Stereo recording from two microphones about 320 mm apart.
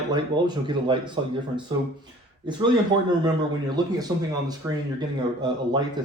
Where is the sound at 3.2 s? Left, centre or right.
Centre.